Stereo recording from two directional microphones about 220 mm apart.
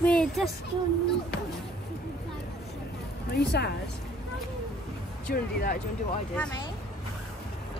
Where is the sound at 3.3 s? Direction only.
50° left (ahead or behind).